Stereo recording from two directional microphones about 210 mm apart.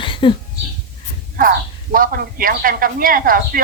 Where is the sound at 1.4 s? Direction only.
40° right (ahead or behind).